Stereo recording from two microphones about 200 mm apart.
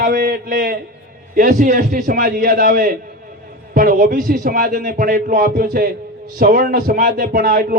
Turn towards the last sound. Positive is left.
turn(degrees=-50)  # may be behind; listen again after turning